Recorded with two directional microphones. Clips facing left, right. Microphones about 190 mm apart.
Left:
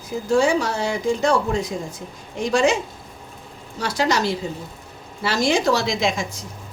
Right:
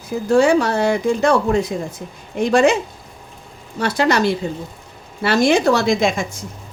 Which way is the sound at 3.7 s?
55° right (ahead or behind).